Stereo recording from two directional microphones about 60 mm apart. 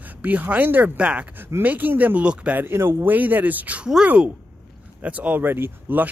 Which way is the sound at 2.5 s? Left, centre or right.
Right.